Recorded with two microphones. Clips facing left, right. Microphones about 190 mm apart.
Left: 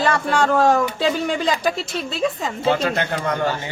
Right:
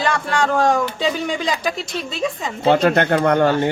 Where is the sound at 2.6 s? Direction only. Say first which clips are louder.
Right 6 dB; 60° right (ahead or behind).